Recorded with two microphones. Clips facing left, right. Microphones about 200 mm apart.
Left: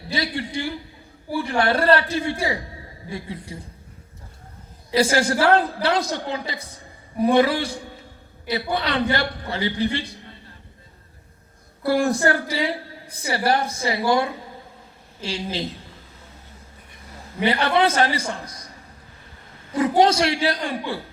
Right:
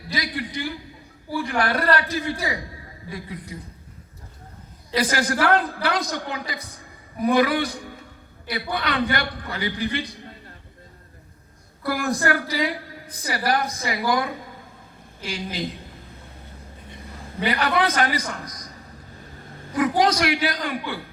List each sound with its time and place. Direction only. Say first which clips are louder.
0.1 s a woman's voice: left 3 dB; 30° left (ahead or behind)
4.9 s a woman's voice: left 3 dB; 25° left (ahead or behind)
11.8 s a woman's voice: left 5 dB; 30° left (ahead or behind)
17.4 s a woman's voice: left 3 dB; 30° left (ahead or behind)
19.7 s a woman's voice: left 3 dB; 25° left (ahead or behind)